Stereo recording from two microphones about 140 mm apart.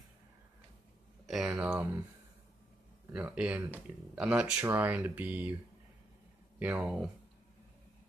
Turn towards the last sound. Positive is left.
turn(degrees=-5)  # may be behind; listen again after turning